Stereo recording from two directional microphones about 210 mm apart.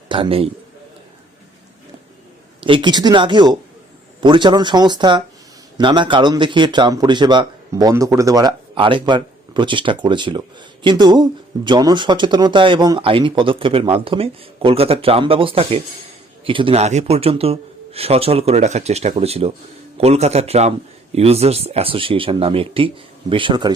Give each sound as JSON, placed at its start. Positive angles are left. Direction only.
{"t": 0.1, "sound": "a man's voice", "side_deg": -25}
{"t": 2.6, "sound": "a man's voice", "side_deg": -20}